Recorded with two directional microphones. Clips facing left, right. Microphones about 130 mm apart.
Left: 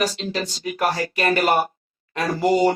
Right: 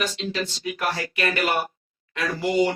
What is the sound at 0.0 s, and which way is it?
Speech, 40° left (ahead or behind).